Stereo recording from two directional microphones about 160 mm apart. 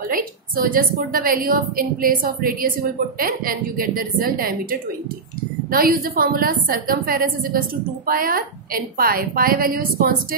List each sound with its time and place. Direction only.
0.1 s a woman's voice: 60° right (ahead or behind)